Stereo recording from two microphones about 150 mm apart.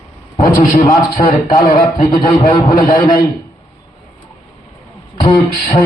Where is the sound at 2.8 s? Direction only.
70° left (ahead or behind).